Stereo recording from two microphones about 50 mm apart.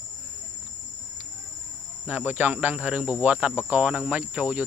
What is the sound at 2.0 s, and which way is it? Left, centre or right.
Speech, right.